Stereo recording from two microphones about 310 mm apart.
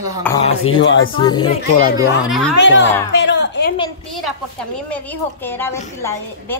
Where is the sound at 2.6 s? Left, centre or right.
Left.